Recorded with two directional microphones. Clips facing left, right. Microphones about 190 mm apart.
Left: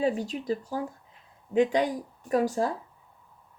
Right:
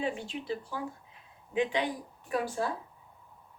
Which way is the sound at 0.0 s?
40° left (ahead or behind).